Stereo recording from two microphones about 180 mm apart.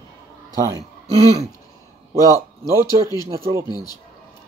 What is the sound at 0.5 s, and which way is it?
Speech, 20° right (ahead or behind).